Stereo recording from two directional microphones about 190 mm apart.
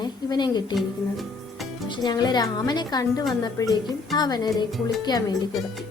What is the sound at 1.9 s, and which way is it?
Speech, 20° left (ahead or behind).